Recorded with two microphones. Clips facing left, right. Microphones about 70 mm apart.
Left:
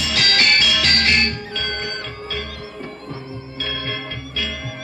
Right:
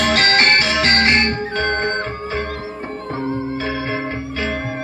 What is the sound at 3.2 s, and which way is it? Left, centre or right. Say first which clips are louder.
Music: right 11 dB; right.